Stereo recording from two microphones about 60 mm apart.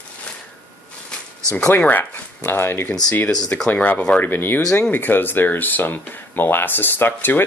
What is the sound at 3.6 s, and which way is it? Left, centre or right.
Speech, left.